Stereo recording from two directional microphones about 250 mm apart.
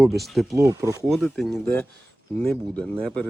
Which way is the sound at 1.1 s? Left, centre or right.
Centre.